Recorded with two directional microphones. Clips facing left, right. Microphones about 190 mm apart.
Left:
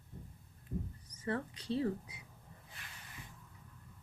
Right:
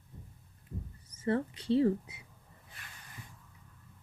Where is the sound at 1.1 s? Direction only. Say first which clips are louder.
Right 7 dB; 25° right (ahead or behind).